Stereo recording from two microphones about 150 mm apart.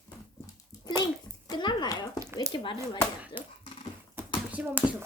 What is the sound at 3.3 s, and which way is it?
Speech, 15° right (ahead or behind).